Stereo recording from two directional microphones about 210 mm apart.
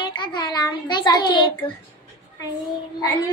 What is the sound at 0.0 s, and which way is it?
A child's voice, 20° left (ahead or behind).